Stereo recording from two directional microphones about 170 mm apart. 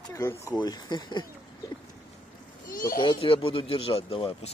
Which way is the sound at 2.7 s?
55° left (ahead or behind).